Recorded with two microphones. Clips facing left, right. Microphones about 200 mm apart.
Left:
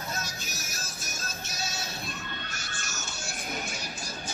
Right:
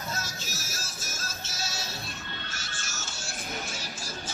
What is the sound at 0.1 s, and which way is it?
Music, 15° left (ahead or behind).